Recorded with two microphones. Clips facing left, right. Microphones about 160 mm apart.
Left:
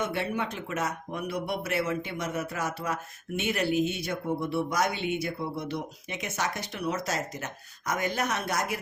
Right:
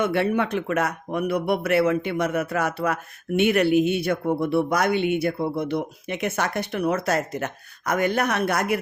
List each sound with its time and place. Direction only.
0.0 s a man's voice: 65° right (ahead or behind)